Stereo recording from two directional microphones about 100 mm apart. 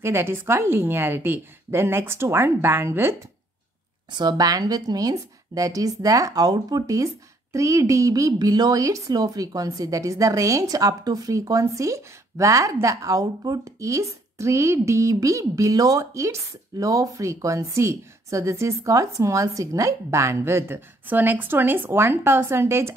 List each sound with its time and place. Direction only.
0.0 s a woman's voice: 25° right (ahead or behind)
4.1 s a woman's voice: 45° right (ahead or behind); by 22.9 s 25° right (ahead or behind)